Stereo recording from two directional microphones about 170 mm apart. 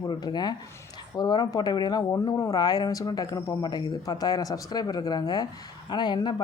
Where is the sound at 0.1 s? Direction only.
25° left (ahead or behind).